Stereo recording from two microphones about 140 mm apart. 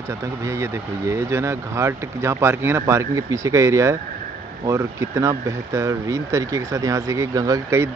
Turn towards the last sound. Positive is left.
turn(degrees=-20)  # may be behind; listen again after turning